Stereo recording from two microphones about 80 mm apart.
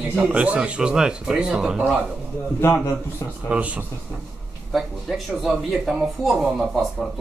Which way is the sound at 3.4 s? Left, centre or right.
Centre.